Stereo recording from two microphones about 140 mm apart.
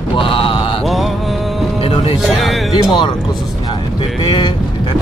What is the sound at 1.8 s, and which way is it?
Music, 45° left (ahead or behind).